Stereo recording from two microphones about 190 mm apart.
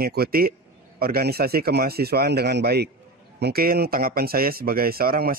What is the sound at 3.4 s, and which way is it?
Mantra, 55° right (ahead or behind).